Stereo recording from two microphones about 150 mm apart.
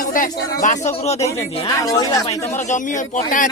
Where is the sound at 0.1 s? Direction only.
65° left (ahead or behind).